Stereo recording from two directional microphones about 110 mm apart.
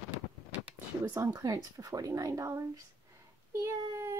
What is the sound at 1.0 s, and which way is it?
Speech, 25° right (ahead or behind).